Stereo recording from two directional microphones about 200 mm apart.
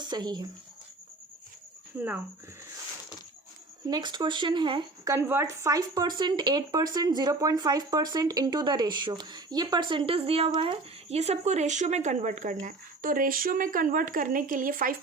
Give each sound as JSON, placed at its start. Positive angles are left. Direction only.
{"t": 0.0, "sound": "speech", "side_deg": -20}
{"t": 2.0, "sound": "speech", "side_deg": -10}
{"t": 3.8, "sound": "speech", "side_deg": -20}